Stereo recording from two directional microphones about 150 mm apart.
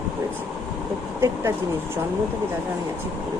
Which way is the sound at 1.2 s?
20° right (ahead or behind).